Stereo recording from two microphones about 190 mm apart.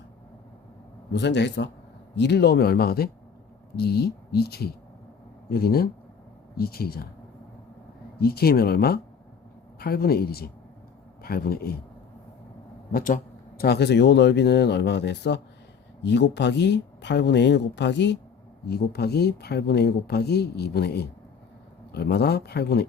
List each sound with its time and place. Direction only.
1.1 s speech: 65° left (ahead or behind)
8.2 s speech: 55° left (ahead or behind)
12.9 s speech: 50° left (ahead or behind)